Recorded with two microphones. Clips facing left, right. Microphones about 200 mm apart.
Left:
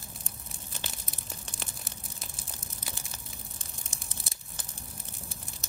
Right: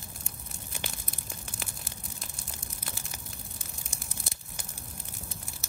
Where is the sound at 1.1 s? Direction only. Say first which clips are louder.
Right 1 dB; centre (ahead or behind).